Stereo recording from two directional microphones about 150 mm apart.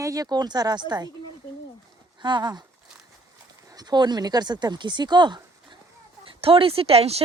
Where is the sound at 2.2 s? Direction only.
30° right (ahead or behind).